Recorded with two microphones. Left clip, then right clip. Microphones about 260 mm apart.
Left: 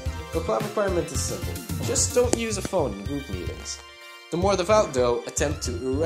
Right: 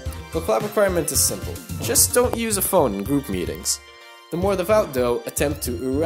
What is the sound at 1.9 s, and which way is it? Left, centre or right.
Speech, right.